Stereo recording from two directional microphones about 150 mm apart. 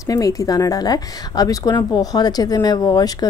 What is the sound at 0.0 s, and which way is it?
A woman's voice, 25° left (ahead or behind).